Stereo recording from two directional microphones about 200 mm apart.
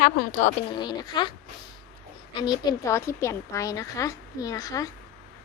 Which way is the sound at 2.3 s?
20° left (ahead or behind).